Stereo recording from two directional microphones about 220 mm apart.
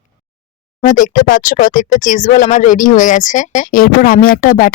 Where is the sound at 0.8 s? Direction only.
35° left (ahead or behind).